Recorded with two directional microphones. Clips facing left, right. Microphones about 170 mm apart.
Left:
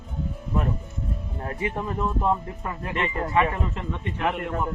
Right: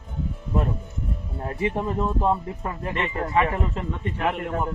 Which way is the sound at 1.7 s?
25° right (ahead or behind).